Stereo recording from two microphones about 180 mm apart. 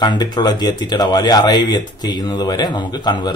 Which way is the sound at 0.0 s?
25° left (ahead or behind).